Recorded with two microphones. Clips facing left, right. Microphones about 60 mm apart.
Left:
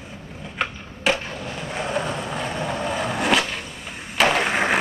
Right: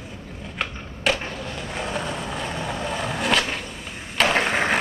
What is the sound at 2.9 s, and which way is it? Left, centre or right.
Skateboard, centre.